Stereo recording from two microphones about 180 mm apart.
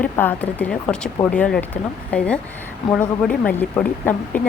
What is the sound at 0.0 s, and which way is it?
A woman's voice, 10° left (ahead or behind).